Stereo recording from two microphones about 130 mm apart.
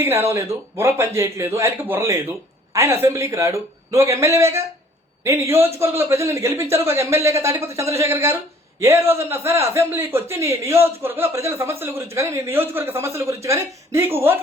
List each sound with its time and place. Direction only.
0.0 s a man's voice: 20° right (ahead or behind)